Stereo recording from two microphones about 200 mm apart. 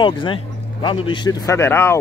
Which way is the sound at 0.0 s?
25° left (ahead or behind).